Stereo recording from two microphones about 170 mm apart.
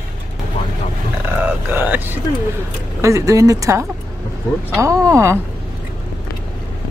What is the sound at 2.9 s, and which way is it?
Speech, 15° right (ahead or behind).